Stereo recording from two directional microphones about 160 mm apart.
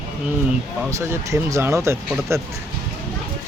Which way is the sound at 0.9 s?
20° right (ahead or behind).